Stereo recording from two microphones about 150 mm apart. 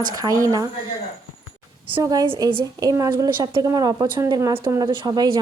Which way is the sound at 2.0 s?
25° right (ahead or behind).